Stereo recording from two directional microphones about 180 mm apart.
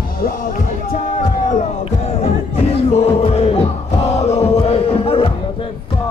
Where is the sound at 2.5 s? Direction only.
35° left (ahead or behind).